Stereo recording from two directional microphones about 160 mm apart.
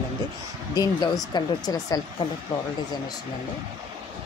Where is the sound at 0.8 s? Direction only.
25° left (ahead or behind).